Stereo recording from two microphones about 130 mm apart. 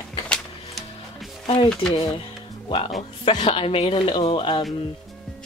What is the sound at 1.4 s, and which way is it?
Speech, 45° left (ahead or behind).